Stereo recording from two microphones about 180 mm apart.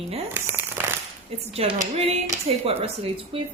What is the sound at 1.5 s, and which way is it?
A woman's voice, 35° right (ahead or behind).